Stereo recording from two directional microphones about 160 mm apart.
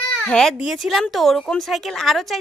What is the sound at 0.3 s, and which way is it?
A woman's voice, 5° left (ahead or behind).